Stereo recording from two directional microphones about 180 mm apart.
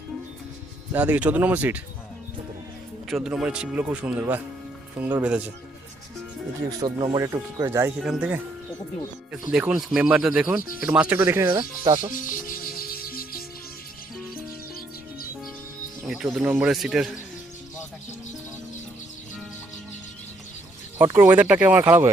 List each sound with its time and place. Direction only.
0.9 s speech: 10° right (ahead or behind)
3.1 s speech: centre (ahead or behind)
6.7 s speech: 25° right (ahead or behind)
7.9 s speech: 5° right (ahead or behind)
9.5 s speech: 5° right (ahead or behind)
12.1 s music: 50° left (ahead or behind)
16.0 s speech: 5° right (ahead or behind)
21.0 s speech: 10° right (ahead or behind)